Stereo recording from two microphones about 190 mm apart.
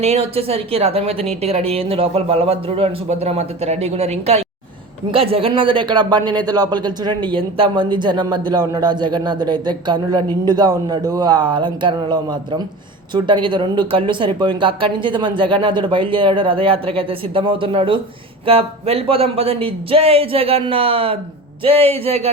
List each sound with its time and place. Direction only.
0.0 s a woman's voice: 30° right (ahead or behind)